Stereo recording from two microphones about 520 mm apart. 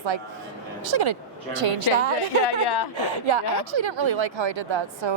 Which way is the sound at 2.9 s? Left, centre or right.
Right.